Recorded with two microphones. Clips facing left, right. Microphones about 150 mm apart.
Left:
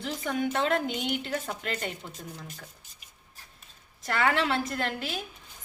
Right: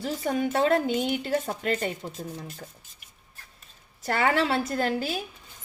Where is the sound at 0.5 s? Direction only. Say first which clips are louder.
Right 5 dB; 40° right (ahead or behind).